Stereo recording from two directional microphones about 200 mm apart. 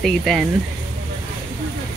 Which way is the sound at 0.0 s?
Centre (ahead or behind).